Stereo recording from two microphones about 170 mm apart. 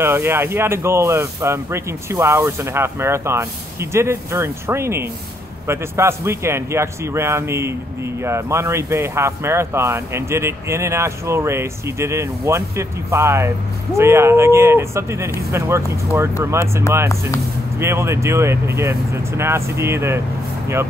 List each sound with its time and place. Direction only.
0.0 s a man's voice: 15° right (ahead or behind)